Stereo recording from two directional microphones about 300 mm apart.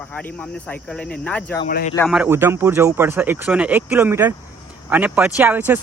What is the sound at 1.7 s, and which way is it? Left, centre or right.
Speech, left.